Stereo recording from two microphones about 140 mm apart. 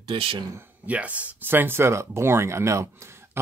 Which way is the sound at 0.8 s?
10° right (ahead or behind).